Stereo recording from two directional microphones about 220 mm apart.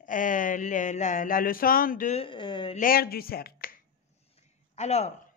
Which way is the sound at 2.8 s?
40° left (ahead or behind).